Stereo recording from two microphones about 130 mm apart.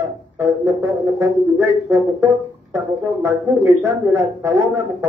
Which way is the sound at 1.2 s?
15° right (ahead or behind).